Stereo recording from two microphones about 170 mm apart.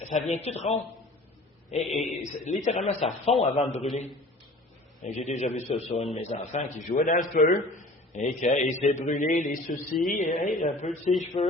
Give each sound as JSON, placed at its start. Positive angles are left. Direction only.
{"t": 0.1, "sound": "a man's voice", "side_deg": 45}
{"t": 2.0, "sound": "speech", "side_deg": 45}
{"t": 5.1, "sound": "a man's voice", "side_deg": 40}